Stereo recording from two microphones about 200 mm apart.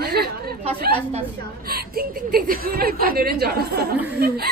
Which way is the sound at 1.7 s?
50° right (ahead or behind).